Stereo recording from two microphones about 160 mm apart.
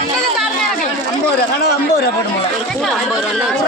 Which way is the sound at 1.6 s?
90° left.